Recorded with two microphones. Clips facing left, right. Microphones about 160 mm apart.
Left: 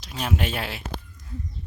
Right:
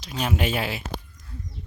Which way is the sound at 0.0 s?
Centre (ahead or behind).